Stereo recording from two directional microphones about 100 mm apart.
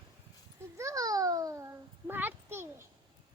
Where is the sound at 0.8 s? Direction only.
35° right (ahead or behind).